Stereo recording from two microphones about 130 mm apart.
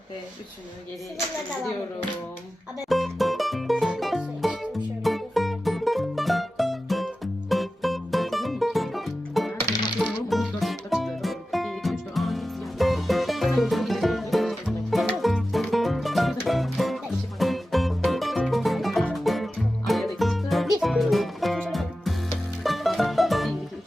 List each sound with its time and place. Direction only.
2.9 s music: centre (ahead or behind)
9.6 s coin: 30° left (ahead or behind)
10.0 s music: centre (ahead or behind)